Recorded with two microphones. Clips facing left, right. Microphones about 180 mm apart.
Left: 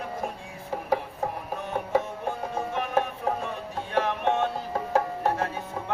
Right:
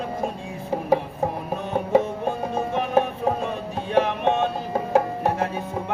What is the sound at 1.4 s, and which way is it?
Music, 20° right (ahead or behind).